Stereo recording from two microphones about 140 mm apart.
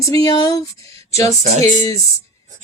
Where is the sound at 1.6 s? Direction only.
25° left (ahead or behind).